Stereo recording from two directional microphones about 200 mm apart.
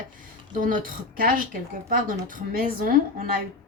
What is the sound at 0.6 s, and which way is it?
Speech, 40° right (ahead or behind).